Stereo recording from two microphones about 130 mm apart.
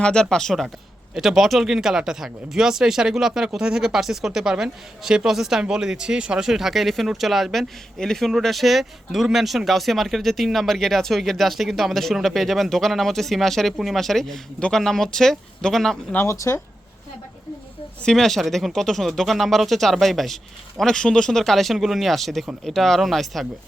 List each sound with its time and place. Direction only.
0.0 s speech: 5° left (ahead or behind)
16.1 s speech: 20° left (ahead or behind)
18.0 s speech: 5° left (ahead or behind)